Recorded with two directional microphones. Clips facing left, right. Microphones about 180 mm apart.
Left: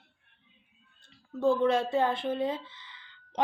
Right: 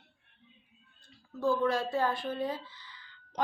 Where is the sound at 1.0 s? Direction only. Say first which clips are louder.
Left 4 dB; 25° left (ahead or behind).